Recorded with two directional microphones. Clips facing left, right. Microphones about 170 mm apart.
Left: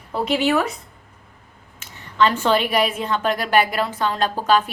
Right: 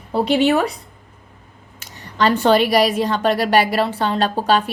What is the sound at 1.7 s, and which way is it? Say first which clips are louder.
A woman's voice: left 1 dB; 40° right (ahead or behind).